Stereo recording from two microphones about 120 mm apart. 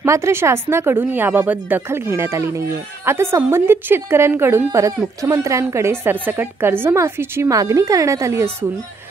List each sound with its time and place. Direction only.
0.0 s a woman's voice: 25° right (ahead or behind)